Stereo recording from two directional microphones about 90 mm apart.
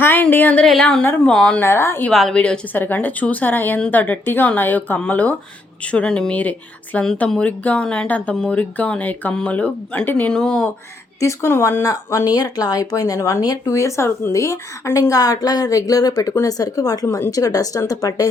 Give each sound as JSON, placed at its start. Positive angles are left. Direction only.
{"t": 0.0, "sound": "speech", "side_deg": 25}
{"t": 0.6, "sound": "speech", "side_deg": 5}
{"t": 1.6, "sound": "a woman's voice", "side_deg": 30}
{"t": 2.0, "sound": "speech", "side_deg": 5}
{"t": 2.7, "sound": "a woman's voice", "side_deg": 20}
{"t": 11.2, "sound": "a woman's voice", "side_deg": 30}